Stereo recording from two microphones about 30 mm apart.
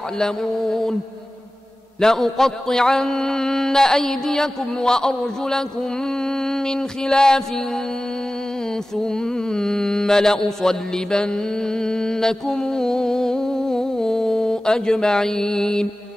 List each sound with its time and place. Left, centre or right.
0.2 s mantra: centre
2.0 s mantra: centre